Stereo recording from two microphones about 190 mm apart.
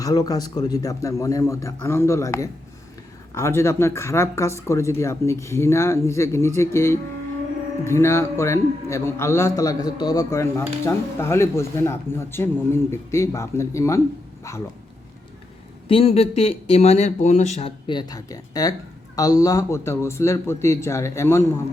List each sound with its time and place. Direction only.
0.0 s a man's voice: 20° left (ahead or behind)
15.9 s speech: 30° left (ahead or behind)
17.8 s a man's voice: 20° left (ahead or behind)